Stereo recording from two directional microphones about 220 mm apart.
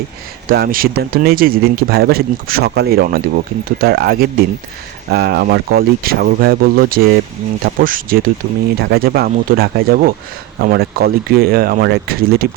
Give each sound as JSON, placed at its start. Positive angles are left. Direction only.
{"t": 0.4, "sound": "speech", "side_deg": -40}